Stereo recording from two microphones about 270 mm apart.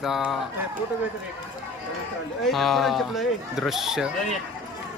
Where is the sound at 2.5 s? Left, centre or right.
Centre.